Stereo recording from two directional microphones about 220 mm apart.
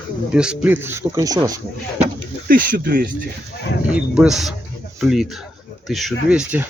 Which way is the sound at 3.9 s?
5° right (ahead or behind).